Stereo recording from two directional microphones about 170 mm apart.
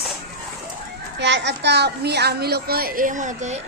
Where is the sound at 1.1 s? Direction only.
90° right.